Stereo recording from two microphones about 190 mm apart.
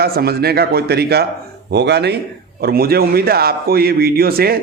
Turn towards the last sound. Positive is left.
turn(degrees=-55)  # may be behind; listen again after turning